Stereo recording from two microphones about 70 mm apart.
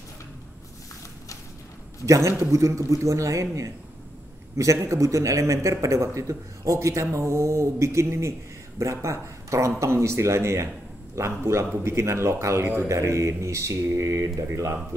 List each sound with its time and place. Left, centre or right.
2.0 s a man's voice: right